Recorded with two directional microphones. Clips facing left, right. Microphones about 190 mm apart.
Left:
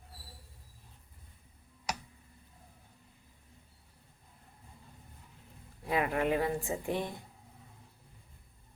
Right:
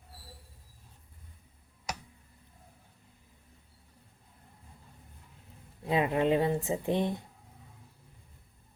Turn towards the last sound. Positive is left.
turn(degrees=-20)  # may be behind; listen again after turning